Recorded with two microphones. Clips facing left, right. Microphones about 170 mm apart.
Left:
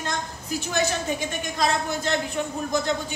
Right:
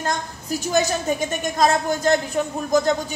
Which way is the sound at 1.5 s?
45° right (ahead or behind).